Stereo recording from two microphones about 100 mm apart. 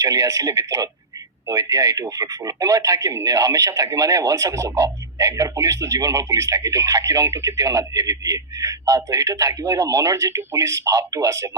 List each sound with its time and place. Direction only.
0.0 s speech: 35° right (ahead or behind)